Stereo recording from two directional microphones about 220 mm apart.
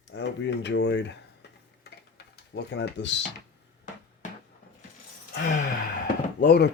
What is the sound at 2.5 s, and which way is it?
Speech, 50° left (ahead or behind).